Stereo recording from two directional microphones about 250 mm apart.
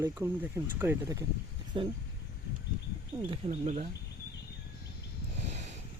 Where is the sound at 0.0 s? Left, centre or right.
Centre.